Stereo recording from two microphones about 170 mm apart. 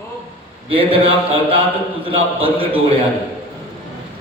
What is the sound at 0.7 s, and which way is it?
A man's voice, 30° right (ahead or behind).